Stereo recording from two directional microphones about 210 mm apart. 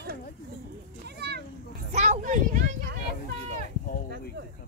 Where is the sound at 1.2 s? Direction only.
50° right (ahead or behind).